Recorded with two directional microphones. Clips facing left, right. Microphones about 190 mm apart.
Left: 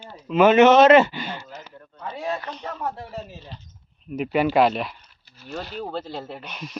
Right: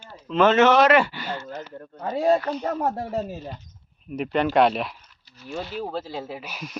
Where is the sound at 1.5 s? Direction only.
50° right (ahead or behind).